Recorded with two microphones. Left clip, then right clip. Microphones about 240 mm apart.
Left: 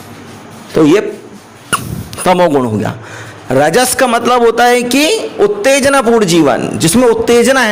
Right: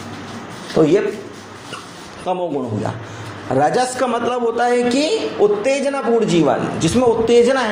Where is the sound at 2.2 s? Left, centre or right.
Left.